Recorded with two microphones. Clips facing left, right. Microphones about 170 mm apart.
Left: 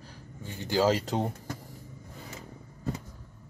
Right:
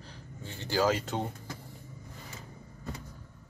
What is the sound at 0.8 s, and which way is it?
Speech, 35° left (ahead or behind).